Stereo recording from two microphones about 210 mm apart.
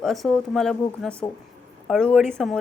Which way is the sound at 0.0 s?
Centre (ahead or behind).